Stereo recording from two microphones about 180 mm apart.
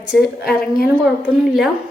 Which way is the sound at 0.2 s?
60° left (ahead or behind).